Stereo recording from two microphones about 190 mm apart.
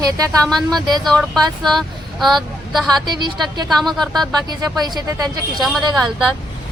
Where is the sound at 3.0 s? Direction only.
25° right (ahead or behind).